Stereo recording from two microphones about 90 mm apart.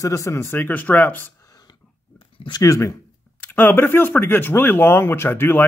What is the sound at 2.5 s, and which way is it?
Speech, 45° left (ahead or behind).